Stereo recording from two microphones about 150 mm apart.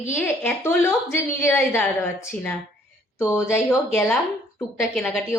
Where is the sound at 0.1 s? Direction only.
15° left (ahead or behind).